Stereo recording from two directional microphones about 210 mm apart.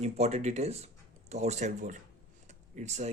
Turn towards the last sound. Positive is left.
turn(degrees=-30)  # may be behind; listen again after turning